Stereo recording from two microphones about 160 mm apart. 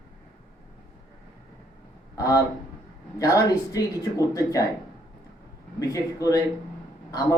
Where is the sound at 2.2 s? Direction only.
20° left (ahead or behind).